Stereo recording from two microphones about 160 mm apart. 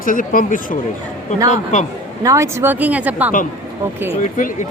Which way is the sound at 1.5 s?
45° left (ahead or behind).